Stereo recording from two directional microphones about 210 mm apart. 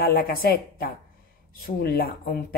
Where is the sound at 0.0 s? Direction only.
45° left (ahead or behind).